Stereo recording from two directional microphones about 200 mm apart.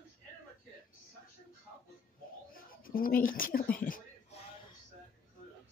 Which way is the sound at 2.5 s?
45° left (ahead or behind).